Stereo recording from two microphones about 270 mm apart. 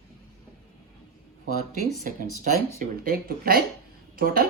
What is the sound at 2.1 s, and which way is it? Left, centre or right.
Speech, right.